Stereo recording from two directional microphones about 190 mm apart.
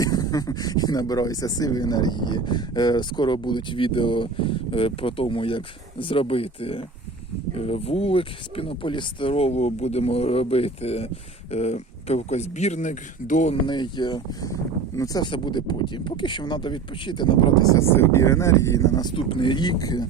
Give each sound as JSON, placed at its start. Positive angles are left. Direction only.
{"t": 0.0, "sound": "speech", "side_deg": 20}
{"t": 13.7, "sound": "speech", "side_deg": 25}